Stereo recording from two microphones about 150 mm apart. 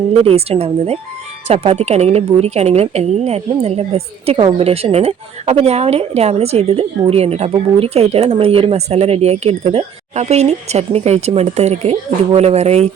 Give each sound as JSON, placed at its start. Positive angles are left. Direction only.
{"t": 0.3, "sound": "a woman's voice", "side_deg": -40}